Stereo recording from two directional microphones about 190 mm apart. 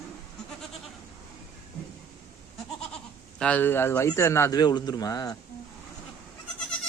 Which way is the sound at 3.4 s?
10° left (ahead or behind).